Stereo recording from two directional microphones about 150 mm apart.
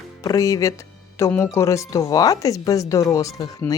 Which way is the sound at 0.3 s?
20° left (ahead or behind).